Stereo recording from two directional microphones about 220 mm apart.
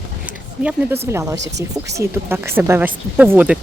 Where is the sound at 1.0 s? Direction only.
15° right (ahead or behind).